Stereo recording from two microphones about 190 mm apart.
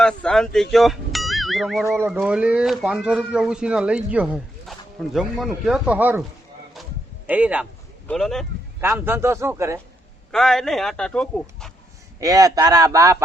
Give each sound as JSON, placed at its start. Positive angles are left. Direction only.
{"t": 0.0, "sound": "speech", "side_deg": 5}
{"t": 7.3, "sound": "speech", "side_deg": -5}
{"t": 8.8, "sound": "speech", "side_deg": -10}
{"t": 10.3, "sound": "speech", "side_deg": 5}
{"t": 12.2, "sound": "speech", "side_deg": -20}